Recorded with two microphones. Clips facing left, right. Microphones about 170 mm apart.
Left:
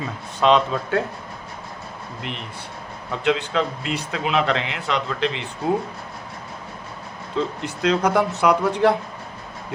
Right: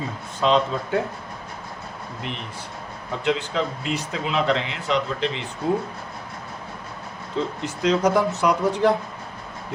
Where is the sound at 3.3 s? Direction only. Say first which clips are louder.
Left 2 dB; 65° left (ahead or behind).